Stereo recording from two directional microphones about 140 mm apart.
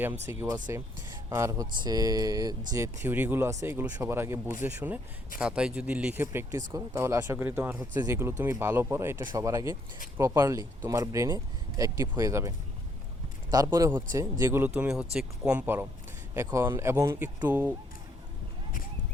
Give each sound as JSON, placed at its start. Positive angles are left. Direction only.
{"t": 0.0, "sound": "speech", "side_deg": -15}
{"t": 6.5, "sound": "speech", "side_deg": -25}
{"t": 13.7, "sound": "speech", "side_deg": -20}
{"t": 14.8, "sound": "speech", "side_deg": -5}